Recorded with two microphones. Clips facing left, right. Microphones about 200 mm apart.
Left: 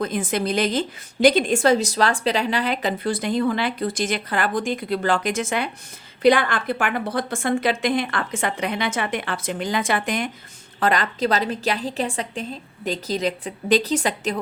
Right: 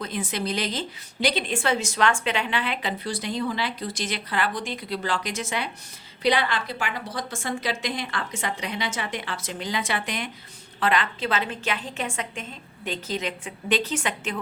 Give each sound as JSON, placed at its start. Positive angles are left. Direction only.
{"t": 0.0, "sound": "a woman's voice", "side_deg": 50}